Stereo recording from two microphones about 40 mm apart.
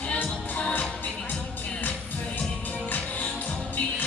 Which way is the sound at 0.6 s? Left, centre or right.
Left.